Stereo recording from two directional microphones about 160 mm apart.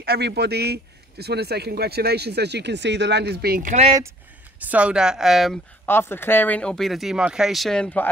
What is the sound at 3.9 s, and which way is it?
Speech, 15° right (ahead or behind).